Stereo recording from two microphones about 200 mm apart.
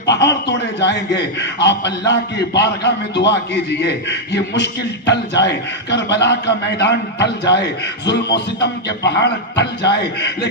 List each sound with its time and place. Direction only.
0.0 s a man's voice: 60° left (ahead or behind)